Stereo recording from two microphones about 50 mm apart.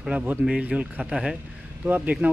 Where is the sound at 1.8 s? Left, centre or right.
Right.